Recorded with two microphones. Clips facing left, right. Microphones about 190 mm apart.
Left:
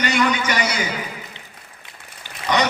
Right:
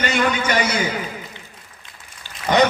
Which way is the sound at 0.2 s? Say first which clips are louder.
Right 2 dB; 50° right (ahead or behind).